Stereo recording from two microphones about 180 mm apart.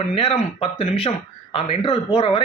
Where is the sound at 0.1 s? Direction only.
35° left (ahead or behind).